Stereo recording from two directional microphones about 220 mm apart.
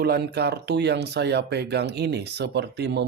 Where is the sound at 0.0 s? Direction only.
50° right (ahead or behind).